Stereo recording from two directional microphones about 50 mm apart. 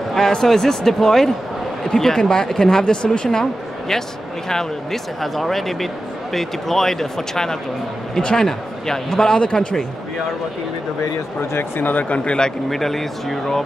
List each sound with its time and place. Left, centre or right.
0.1 s a man's voice: centre
4.5 s a man's voice: centre
11.5 s speech: left
12.3 s a man's voice: centre